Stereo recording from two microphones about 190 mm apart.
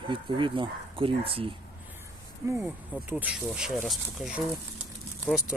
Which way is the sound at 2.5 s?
10° right (ahead or behind).